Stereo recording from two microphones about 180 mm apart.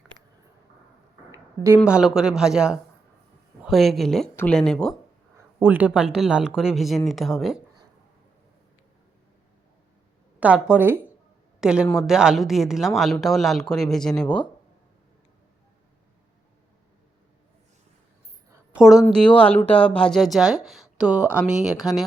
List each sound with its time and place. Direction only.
1.3 s a sound: 15° right (ahead or behind)
1.8 s speech: 5° right (ahead or behind)
5.5 s speech: 10° right (ahead or behind)
10.4 s a woman's voice: 10° right (ahead or behind)
18.5 s a sound: 5° right (ahead or behind)
19.1 s speech: 5° left (ahead or behind)